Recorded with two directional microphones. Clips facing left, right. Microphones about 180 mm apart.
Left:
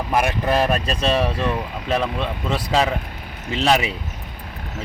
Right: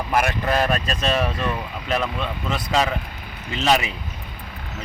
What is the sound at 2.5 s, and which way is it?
Speech, 30° left (ahead or behind).